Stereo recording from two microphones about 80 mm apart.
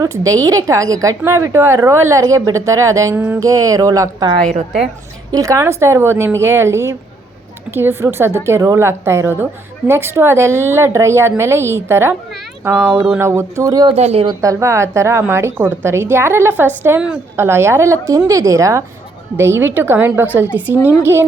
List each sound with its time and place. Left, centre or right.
0.0 s a woman's voice: right
3.2 s a woman's voice: right
3.4 s a woman's voice: right
5.3 s a woman's voice: right
15.5 s a woman's voice: right
19.4 s a woman's voice: right